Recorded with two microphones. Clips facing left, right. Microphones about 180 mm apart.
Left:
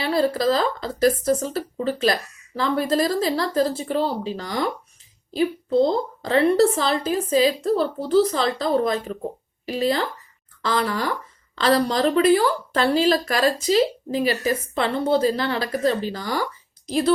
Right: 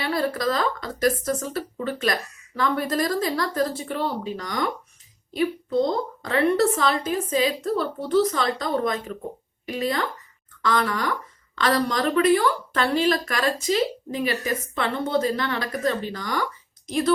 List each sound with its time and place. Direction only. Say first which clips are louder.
0.0 s a woman's voice: left 4 dB; 30° left (ahead or behind)